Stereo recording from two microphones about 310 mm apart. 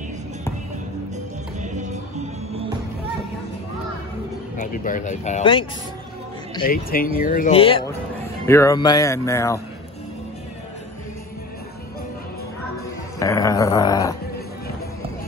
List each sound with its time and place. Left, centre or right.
1.6 s music: right
4.6 s speech: left
6.6 s speech: left; by 9.6 s centre
13.2 s speech: centre